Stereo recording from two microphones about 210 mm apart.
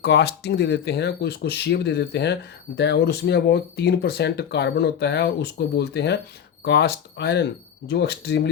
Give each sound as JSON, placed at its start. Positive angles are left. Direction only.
{"t": 0.0, "sound": "speech", "side_deg": 55}